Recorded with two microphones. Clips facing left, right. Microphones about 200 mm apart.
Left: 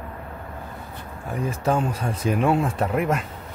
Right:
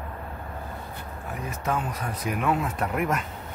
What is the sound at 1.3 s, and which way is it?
Speech, 30° left (ahead or behind).